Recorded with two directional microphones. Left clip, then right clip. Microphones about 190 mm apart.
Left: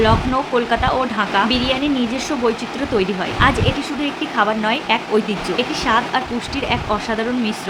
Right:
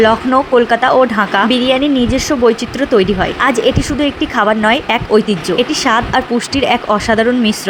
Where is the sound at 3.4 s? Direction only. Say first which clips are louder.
Right 3 dB; 30° right (ahead or behind).